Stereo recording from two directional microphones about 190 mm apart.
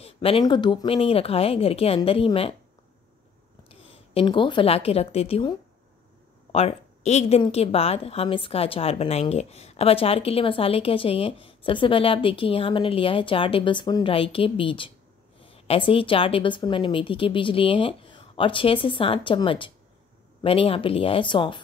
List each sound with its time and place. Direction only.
0.0 s speech: 30° left (ahead or behind)
3.6 s a woman's voice: 30° left (ahead or behind)